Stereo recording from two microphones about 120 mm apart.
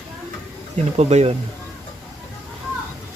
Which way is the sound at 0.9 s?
65° right (ahead or behind).